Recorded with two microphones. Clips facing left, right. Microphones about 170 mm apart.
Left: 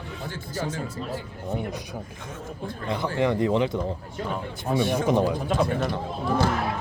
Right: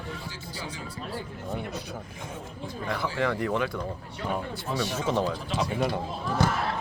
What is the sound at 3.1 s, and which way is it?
Speech, 20° left (ahead or behind).